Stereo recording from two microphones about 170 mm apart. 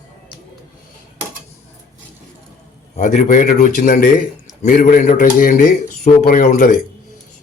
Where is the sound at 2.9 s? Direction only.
45° left (ahead or behind).